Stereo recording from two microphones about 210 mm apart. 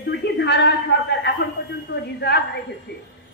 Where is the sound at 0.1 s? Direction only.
55° left (ahead or behind).